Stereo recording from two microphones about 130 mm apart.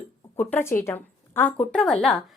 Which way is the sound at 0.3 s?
20° left (ahead or behind).